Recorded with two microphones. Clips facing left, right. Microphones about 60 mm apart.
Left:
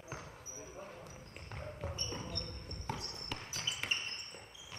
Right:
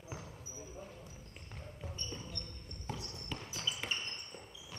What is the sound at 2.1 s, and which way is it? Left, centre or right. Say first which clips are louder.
Basketball bounce: left 3 dB; left.